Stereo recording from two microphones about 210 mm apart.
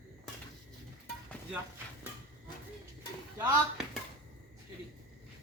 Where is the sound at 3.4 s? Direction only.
5° right (ahead or behind).